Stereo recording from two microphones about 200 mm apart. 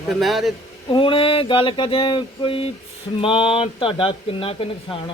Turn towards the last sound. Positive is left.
turn(degrees=25)  # may be behind; listen again after turning